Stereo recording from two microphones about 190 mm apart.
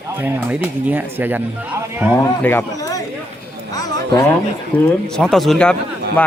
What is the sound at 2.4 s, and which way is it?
Speech, 15° left (ahead or behind).